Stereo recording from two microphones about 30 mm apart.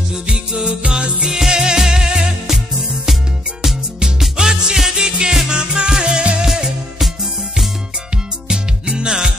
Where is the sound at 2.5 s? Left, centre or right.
Centre; by 6.5 s right.